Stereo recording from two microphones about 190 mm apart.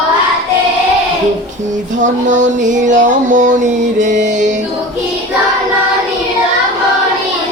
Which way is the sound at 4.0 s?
40° right (ahead or behind).